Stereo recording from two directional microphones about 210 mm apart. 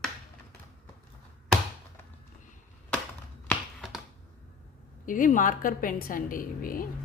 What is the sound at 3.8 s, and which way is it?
Finger snapping, centre (ahead or behind).